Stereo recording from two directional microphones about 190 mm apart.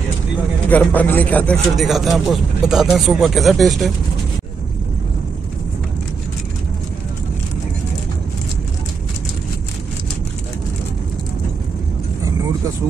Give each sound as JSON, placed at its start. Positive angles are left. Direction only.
{"t": 0.7, "sound": "speech", "side_deg": 10}